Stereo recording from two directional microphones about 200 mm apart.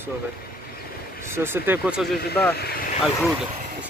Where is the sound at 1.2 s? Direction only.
10° right (ahead or behind).